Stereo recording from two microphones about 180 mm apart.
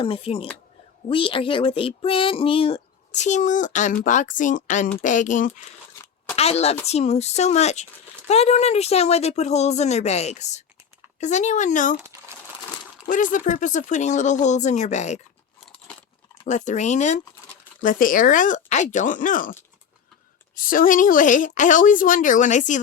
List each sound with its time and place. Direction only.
0.0 s a woman's voice: 30° left (ahead or behind)
13.1 s speech: 45° left (ahead or behind)
16.5 s speech: 40° left (ahead or behind)
20.6 s speech: 50° left (ahead or behind)